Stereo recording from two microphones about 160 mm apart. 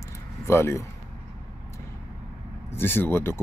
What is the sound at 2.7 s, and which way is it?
Speech, 15° left (ahead or behind).